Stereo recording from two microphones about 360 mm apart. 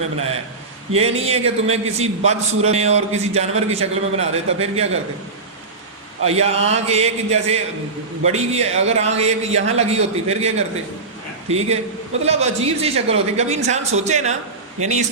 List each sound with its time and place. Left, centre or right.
0.9 s a man's voice: centre
6.2 s a man's voice: centre